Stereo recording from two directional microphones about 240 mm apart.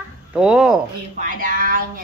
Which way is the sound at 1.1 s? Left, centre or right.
Right.